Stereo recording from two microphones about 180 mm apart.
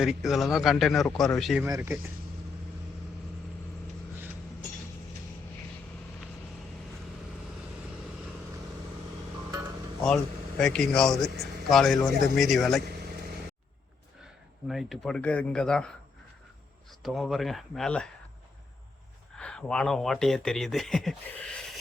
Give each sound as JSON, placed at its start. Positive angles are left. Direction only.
{"t": 0.0, "sound": "a man's voice", "side_deg": -5}
{"t": 1.6, "sound": "speech", "side_deg": -15}
{"t": 9.5, "sound": "a sound", "side_deg": -15}
{"t": 10.6, "sound": "a man's voice", "side_deg": 5}
{"t": 12.8, "sound": "vehicle", "side_deg": -60}
{"t": 14.7, "sound": "a man's voice", "side_deg": 0}
{"t": 17.0, "sound": "a man's voice", "side_deg": 0}
{"t": 19.4, "sound": "a man's voice", "side_deg": 5}